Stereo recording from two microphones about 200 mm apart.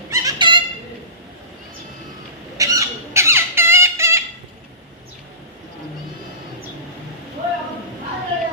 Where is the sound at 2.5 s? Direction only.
15° right (ahead or behind).